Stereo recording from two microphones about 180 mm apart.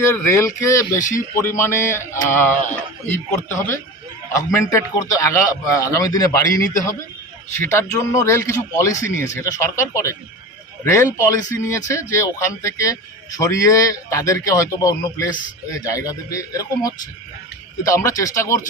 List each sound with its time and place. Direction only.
0.0 s a man's voice: 15° left (ahead or behind)
7.5 s speech: 15° left (ahead or behind)